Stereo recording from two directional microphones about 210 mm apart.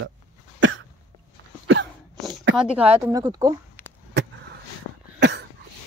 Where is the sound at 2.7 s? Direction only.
10° right (ahead or behind).